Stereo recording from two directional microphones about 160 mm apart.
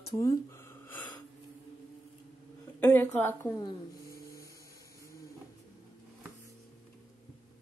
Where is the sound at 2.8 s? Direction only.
10° left (ahead or behind).